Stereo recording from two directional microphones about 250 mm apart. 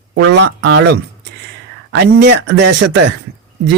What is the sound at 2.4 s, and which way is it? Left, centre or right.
Speech, right.